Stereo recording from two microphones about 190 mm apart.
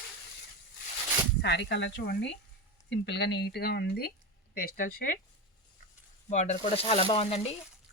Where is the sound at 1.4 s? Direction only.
65° left (ahead or behind); by 5.2 s 45° left (ahead or behind).